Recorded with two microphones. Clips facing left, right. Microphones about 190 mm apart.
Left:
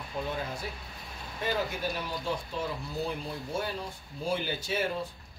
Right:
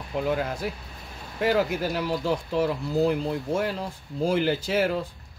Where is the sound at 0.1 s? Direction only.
75° right (ahead or behind).